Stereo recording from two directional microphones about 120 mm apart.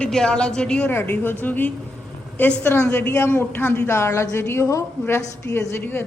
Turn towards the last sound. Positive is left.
turn(degrees=20)  # may be behind; listen again after turning